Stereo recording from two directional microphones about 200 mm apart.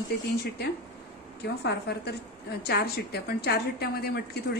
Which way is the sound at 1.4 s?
55° left (ahead or behind).